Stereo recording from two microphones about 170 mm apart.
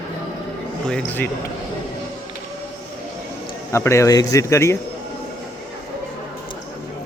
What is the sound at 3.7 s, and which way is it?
Speech, 15° left (ahead or behind).